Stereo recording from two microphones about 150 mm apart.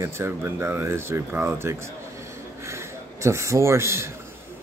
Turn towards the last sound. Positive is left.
turn(degrees=-20)  # may be behind; listen again after turning